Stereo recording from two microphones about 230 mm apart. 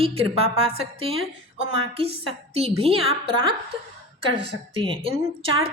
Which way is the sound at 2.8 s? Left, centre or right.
Right.